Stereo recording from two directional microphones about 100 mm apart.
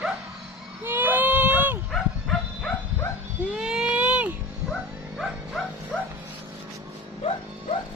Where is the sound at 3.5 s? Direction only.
5° right (ahead or behind).